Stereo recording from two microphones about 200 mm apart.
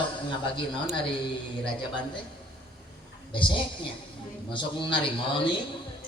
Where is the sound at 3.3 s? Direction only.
25° left (ahead or behind).